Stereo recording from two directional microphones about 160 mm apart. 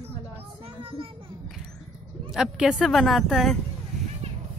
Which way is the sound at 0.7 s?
35° right (ahead or behind).